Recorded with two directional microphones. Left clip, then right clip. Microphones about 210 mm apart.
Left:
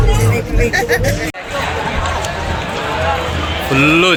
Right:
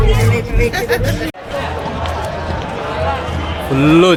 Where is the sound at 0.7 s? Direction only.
55° right (ahead or behind).